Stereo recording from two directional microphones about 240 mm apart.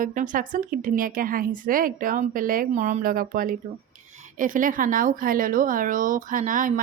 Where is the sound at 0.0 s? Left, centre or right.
Right.